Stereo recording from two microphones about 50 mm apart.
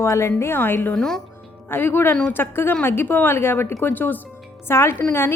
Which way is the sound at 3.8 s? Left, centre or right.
Left.